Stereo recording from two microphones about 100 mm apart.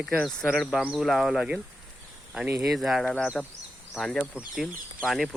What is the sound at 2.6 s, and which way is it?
Speech, centre (ahead or behind).